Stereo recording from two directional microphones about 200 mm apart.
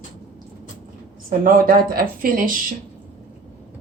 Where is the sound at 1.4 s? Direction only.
45° right (ahead or behind).